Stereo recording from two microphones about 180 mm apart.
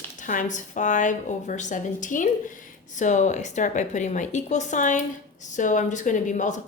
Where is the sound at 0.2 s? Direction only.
45° left (ahead or behind).